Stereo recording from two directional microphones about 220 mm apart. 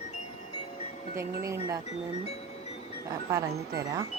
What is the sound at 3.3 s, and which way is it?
Speech, 15° right (ahead or behind).